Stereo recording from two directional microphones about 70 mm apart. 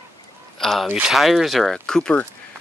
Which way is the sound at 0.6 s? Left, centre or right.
Centre.